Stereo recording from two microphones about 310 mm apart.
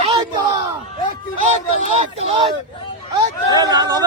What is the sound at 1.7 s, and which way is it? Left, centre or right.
Speech, right.